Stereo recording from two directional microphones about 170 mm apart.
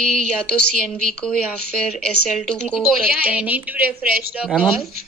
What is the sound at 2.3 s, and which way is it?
A woman's voice, 5° right (ahead or behind).